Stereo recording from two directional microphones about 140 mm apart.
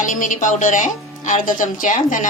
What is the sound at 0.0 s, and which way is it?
Speech, 65° left (ahead or behind).